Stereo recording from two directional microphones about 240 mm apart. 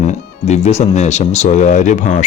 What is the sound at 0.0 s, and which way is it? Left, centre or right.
Speech, left.